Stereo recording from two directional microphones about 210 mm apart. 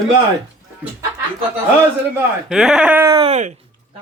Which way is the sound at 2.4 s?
5° right (ahead or behind).